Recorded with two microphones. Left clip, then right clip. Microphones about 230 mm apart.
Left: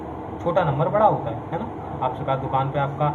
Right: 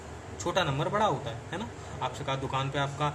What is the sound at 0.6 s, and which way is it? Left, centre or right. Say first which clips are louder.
Speech: left 9 dB; right.